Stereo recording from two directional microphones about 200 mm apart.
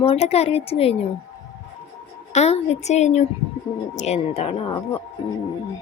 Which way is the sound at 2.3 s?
30° left (ahead or behind).